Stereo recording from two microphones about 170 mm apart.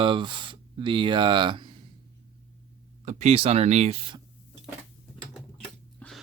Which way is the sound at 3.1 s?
40° right (ahead or behind).